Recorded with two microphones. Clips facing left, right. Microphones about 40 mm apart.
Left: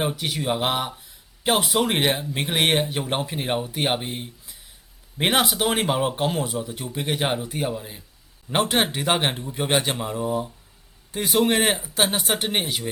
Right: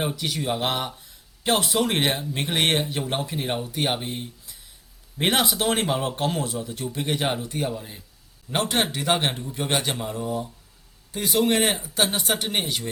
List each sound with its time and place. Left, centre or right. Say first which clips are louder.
0.0 s speech: left 1 dB; centre